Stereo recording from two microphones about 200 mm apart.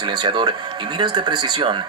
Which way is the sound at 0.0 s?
20° right (ahead or behind).